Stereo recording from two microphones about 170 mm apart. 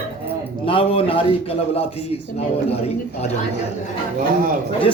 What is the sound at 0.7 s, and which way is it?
Speech, 30° left (ahead or behind).